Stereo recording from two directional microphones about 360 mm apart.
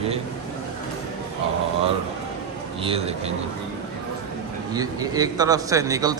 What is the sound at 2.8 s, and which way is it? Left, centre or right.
Speech, centre.